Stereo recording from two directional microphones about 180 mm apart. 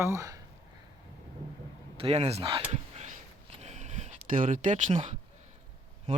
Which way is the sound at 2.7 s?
40° right (ahead or behind).